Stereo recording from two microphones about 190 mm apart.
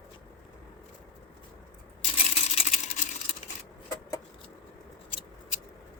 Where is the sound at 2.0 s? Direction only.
30° left (ahead or behind).